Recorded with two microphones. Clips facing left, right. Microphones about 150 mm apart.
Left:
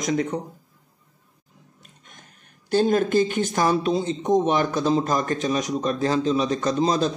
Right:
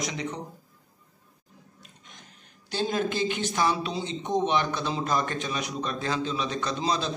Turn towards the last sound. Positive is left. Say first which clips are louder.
# left 7 dB
turn(degrees=45)  # may be behind; listen again after turning